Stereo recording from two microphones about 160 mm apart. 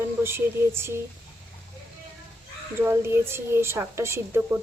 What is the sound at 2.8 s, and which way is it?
Speech, 15° right (ahead or behind).